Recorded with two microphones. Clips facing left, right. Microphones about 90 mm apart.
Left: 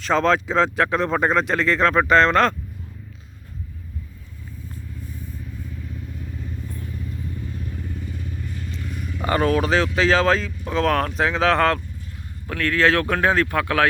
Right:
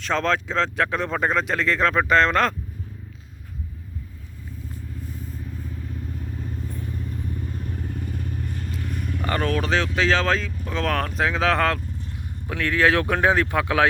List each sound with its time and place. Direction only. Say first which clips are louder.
0.0 s speech: left 4 dB; centre (ahead or behind)
8.0 s vehicle: right 2 dB; 50° right (ahead or behind)
9.2 s speech: left 5 dB; 10° left (ahead or behind)
12.5 s speech: left 1 dB; 15° right (ahead or behind)